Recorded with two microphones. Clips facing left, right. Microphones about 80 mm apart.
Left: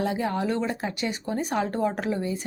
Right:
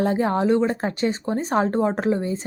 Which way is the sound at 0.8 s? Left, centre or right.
Right.